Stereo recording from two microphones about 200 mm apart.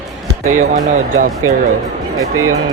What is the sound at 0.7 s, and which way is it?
Speech, 40° right (ahead or behind).